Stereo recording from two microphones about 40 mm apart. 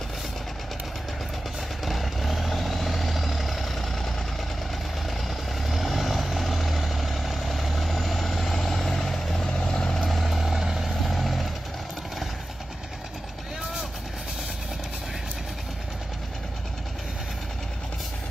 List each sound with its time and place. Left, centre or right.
1.9 s vehicle: centre
5.7 s vehicle: centre
9.5 s vehicle: centre
10.0 s vehicle: centre